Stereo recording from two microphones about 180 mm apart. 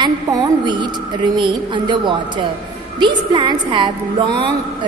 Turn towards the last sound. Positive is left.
turn(degrees=-25)  # may be behind; listen again after turning